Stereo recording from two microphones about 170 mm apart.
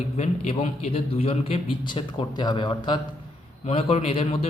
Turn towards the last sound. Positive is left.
turn(degrees=35)  # may be behind; listen again after turning